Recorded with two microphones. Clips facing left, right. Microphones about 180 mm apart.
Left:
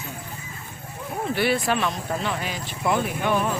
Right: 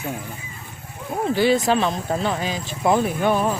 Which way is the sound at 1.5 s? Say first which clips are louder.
Right 4 dB; 25° right (ahead or behind).